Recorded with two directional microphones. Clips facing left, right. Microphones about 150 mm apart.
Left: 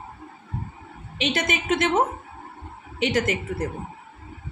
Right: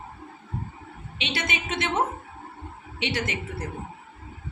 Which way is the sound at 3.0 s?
45° left (ahead or behind).